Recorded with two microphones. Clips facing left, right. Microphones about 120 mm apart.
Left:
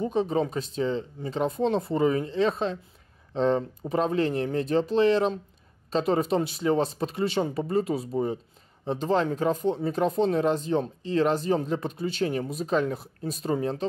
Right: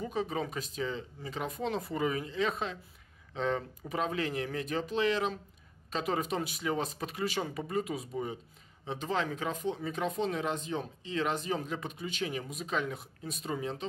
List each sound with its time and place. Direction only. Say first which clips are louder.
0.0 s speech: left 8 dB; 30° left (ahead or behind)